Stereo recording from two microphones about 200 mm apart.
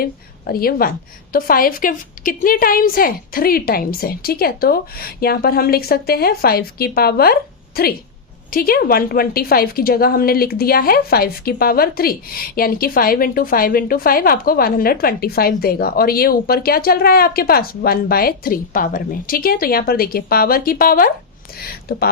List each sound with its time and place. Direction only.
0.0 s a woman's voice: 50° left (ahead or behind)